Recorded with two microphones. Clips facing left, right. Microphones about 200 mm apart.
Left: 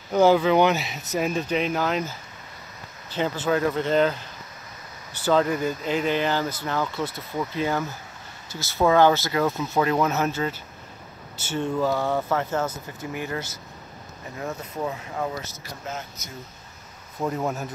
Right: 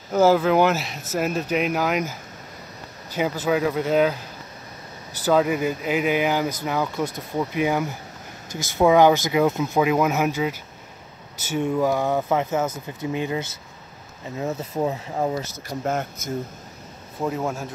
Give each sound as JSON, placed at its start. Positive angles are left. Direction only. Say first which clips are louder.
{"t": 0.1, "sound": "speech", "louder": "right 1 dB", "side_deg": -5}
{"t": 3.2, "sound": "speech", "louder": "right 1 dB", "side_deg": -10}
{"t": 5.2, "sound": "speech", "louder": "right 2 dB", "side_deg": -10}
{"t": 14.4, "sound": "speech", "louder": "right 5 dB", "side_deg": -20}
{"t": 15.8, "sound": "speech", "louder": "right 9 dB", "side_deg": -55}
{"t": 17.2, "sound": "speech", "louder": "right 1 dB", "side_deg": 0}